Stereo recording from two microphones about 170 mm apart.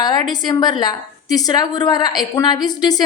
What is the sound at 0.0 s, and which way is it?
A woman's voice, 25° left (ahead or behind).